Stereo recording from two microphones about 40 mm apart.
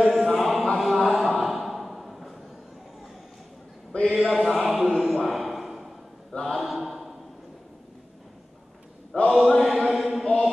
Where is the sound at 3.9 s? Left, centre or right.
Left.